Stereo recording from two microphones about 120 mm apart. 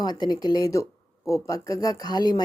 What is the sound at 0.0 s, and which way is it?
Speech, 35° left (ahead or behind).